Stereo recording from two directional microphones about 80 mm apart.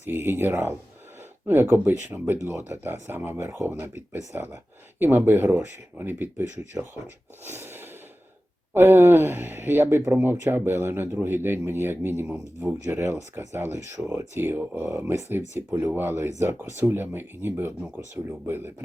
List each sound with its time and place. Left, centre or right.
0.0 s speech: right
7.4 s a sound: right
8.7 s speech: right
14.0 s speech: centre
14.3 s speech: right